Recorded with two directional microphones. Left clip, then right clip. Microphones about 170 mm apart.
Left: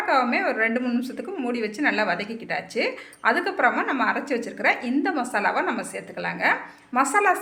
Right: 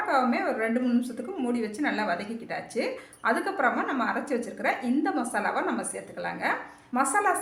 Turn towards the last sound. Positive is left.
turn(degrees=25)  # may be behind; listen again after turning